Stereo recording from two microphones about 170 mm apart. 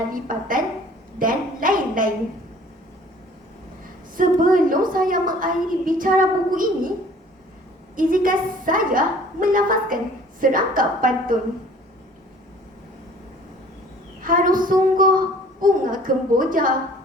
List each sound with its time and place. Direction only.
0.1 s a woman's voice: 55° right (ahead or behind)
4.2 s a woman's voice: 55° right (ahead or behind)
7.9 s a woman's voice: 55° right (ahead or behind)
14.2 s child singing: 55° right (ahead or behind)
15.6 s a woman's voice: 55° right (ahead or behind)